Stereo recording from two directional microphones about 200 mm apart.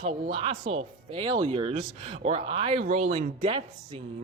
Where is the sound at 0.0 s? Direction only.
25° right (ahead or behind).